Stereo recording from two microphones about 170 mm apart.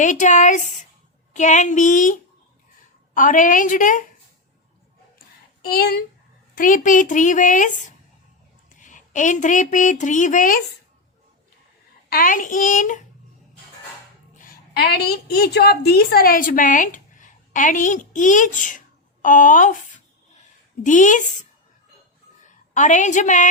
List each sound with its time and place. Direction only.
0.0 s a woman's voice: 45° left (ahead or behind)
3.2 s a woman's voice: 50° left (ahead or behind)
5.7 s speech: 65° left (ahead or behind)
6.6 s a woman's voice: 50° left (ahead or behind)
12.1 s a woman's voice: 55° left (ahead or behind)
14.3 s a woman's voice: 55° left (ahead or behind)
20.8 s a woman's voice: 50° left (ahead or behind)
22.4 s a woman's voice: 45° left (ahead or behind)